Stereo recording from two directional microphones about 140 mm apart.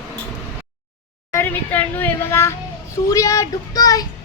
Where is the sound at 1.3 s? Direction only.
15° left (ahead or behind).